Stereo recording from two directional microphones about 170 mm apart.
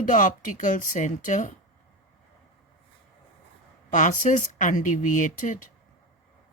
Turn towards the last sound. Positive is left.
turn(degrees=50)  # may be behind; listen again after turning